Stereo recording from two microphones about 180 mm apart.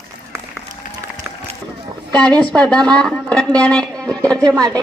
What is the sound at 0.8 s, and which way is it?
Applause, 45° left (ahead or behind).